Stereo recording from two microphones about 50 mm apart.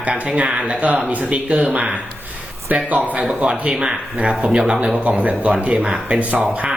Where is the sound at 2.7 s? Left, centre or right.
Right.